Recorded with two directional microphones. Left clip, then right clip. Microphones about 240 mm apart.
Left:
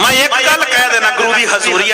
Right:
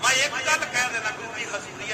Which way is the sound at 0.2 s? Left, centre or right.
Left.